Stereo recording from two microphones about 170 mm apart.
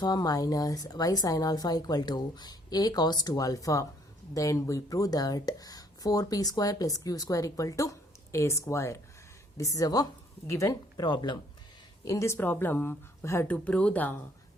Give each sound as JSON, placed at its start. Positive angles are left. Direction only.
{"t": 0.0, "sound": "speech", "side_deg": 20}